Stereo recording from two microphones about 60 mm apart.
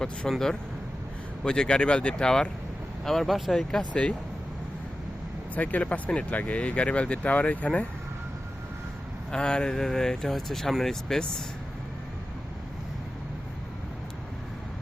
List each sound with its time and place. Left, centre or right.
0.3 s speech: centre
3.0 s speech: centre
5.5 s speech: left
9.3 s speech: centre